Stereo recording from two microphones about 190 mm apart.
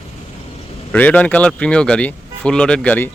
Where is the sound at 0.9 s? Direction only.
5° left (ahead or behind).